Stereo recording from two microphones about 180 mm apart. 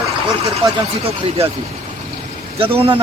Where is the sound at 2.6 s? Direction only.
30° right (ahead or behind).